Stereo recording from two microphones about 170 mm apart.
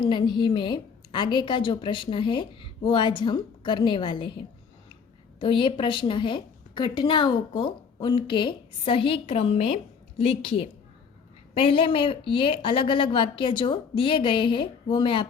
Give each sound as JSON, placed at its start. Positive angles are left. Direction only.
{"t": 0.0, "sound": "a woman's voice", "side_deg": 25}